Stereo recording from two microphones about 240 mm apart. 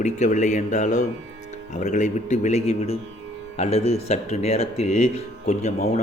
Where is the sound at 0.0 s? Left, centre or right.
Left.